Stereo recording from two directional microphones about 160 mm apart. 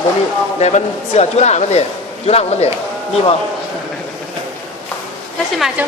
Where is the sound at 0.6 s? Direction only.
45° left (ahead or behind).